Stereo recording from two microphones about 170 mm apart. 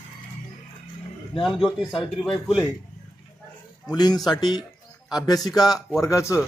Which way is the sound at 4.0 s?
25° left (ahead or behind).